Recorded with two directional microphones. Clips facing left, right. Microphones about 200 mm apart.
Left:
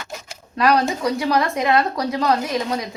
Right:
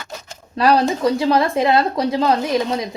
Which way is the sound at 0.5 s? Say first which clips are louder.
Right 2 dB; 30° right (ahead or behind).